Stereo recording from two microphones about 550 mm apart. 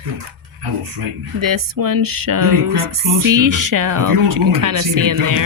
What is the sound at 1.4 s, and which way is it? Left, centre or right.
Speech, right.